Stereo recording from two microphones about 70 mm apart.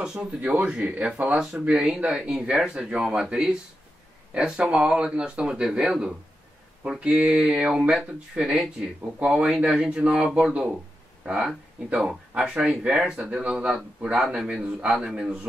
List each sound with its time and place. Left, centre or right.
0.0 s speech: centre
1.3 s speech: centre
14.2 s speech: centre